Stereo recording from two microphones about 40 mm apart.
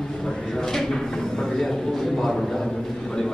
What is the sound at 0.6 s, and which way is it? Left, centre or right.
Speech, centre.